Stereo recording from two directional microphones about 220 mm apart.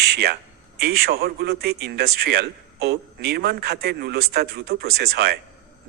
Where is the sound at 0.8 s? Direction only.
45° right (ahead or behind).